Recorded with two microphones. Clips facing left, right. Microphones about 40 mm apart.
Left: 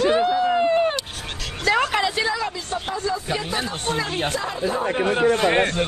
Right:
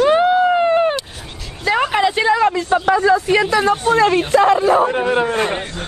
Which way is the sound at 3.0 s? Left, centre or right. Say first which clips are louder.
Right 11 dB; right.